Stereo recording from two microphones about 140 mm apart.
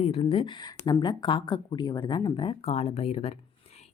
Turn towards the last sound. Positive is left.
turn(degrees=45)  # may be behind; listen again after turning